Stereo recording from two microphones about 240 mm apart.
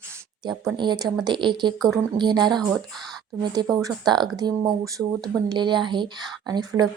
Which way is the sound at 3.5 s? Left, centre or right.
Centre.